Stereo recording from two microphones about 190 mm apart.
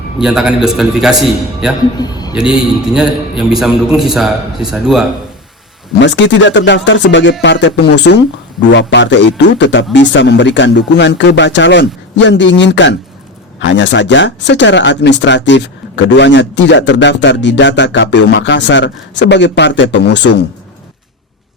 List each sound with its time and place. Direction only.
0.2 s a man's voice: 5° right (ahead or behind)
2.0 s a man's voice: 20° left (ahead or behind)
2.3 s a man's voice: 5° right (ahead or behind)
6.0 s a man's voice: 70° left (ahead or behind)